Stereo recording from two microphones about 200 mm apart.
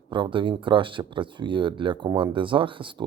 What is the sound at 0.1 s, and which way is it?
Speech, 25° right (ahead or behind).